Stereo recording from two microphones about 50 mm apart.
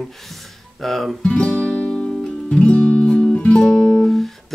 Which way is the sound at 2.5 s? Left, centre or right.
Left.